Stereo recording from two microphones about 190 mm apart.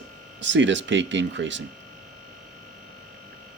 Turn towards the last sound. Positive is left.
turn(degrees=-75)  # may be behind; listen again after turning